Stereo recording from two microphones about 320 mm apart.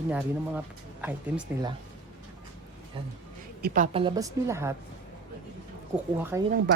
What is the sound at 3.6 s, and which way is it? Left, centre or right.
A woman's voice, right.